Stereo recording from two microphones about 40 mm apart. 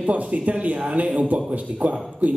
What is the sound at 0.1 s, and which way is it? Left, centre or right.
Speech, right.